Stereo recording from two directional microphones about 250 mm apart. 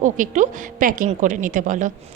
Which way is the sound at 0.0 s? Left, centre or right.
Right.